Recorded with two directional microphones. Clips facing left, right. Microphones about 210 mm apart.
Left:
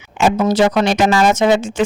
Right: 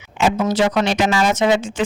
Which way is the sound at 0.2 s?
45° left (ahead or behind).